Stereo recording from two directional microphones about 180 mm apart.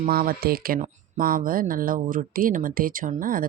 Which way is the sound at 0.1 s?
55° right (ahead or behind).